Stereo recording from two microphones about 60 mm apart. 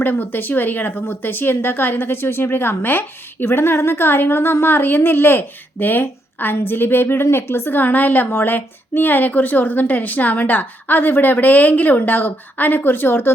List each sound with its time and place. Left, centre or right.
0.0 s speech: left